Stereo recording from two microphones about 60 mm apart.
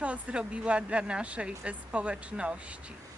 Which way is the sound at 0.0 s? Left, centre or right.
Right.